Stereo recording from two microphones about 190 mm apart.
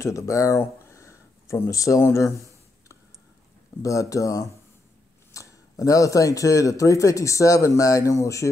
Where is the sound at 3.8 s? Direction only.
15° left (ahead or behind).